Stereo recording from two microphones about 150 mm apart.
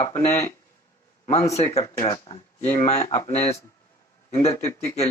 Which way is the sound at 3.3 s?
45° left (ahead or behind).